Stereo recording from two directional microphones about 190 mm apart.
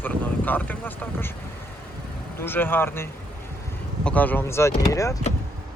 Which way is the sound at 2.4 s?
10° left (ahead or behind).